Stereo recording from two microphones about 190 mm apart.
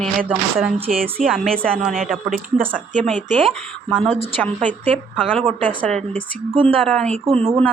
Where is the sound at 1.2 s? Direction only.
Centre (ahead or behind).